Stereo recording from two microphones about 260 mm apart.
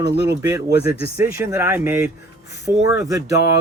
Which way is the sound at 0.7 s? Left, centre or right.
Left.